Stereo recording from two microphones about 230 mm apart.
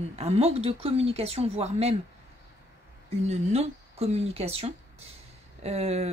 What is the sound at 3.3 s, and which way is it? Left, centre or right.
Speech, right.